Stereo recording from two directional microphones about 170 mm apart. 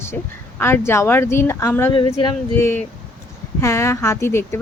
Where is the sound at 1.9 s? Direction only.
30° left (ahead or behind).